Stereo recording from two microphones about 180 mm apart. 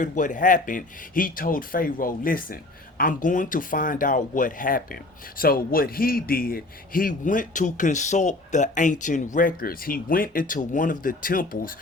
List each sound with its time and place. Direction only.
0.0 s a man's voice: 45° left (ahead or behind)